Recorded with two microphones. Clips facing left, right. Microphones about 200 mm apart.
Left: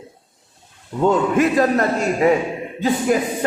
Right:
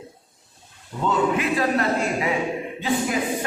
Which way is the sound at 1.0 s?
45° left (ahead or behind).